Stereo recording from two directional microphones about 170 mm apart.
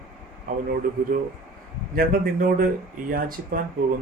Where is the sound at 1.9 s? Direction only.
60° right (ahead or behind).